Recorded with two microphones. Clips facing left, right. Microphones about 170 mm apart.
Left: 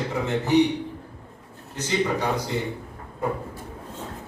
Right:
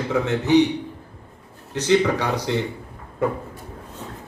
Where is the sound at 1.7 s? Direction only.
75° right (ahead or behind).